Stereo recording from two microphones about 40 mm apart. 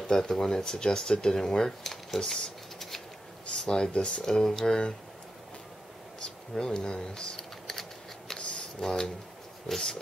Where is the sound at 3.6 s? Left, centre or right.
Left.